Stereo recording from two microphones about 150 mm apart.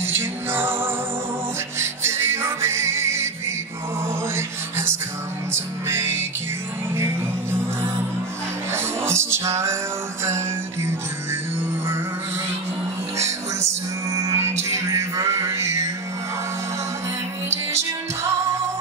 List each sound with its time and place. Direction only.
0.0 s music: 15° right (ahead or behind)
8.7 s music: 15° right (ahead or behind)
14.1 s music: 20° right (ahead or behind)
17.5 s music: 20° right (ahead or behind)